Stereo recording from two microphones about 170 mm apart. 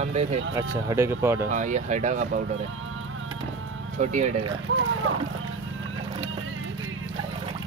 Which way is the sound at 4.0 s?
50° right (ahead or behind).